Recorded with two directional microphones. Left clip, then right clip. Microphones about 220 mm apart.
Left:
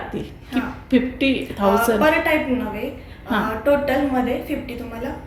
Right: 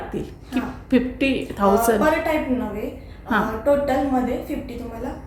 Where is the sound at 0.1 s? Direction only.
5° right (ahead or behind).